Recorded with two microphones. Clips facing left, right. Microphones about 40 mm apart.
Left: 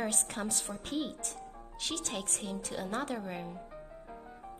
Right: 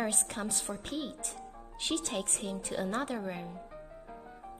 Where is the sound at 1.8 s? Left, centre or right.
Centre.